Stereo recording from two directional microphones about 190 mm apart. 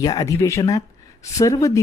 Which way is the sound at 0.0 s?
20° left (ahead or behind).